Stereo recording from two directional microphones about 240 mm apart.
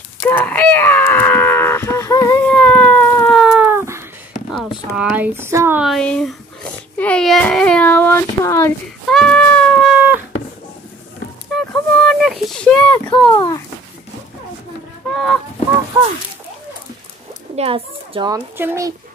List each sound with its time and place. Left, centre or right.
0.2 s a sound: centre
4.9 s speech: centre
11.7 s a sound: centre
13.3 s a child's voice: centre
15.0 s goose: centre
17.6 s a child's voice: right